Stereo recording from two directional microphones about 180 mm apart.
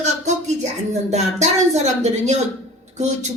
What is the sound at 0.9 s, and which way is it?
Speech, 40° right (ahead or behind).